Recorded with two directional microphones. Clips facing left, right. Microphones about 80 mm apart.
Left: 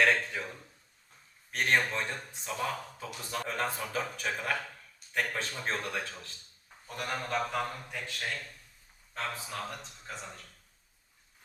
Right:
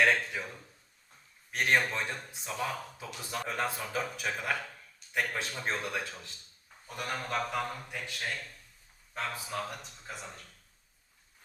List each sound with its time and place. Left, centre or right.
0.0 s speech: centre
1.5 s speech: centre
7.0 s speech: centre
7.7 s speech: centre